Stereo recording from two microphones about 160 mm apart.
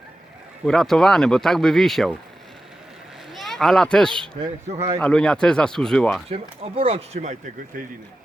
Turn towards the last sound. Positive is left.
turn(degrees=-45)  # may be behind; listen again after turning